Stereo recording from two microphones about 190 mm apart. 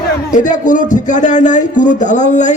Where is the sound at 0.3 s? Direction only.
40° left (ahead or behind).